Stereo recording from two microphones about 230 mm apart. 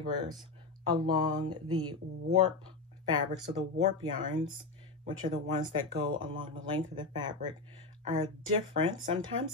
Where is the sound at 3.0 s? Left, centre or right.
Centre.